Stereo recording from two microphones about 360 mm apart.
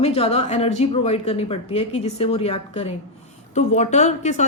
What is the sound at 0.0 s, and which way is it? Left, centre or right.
A woman's voice, centre.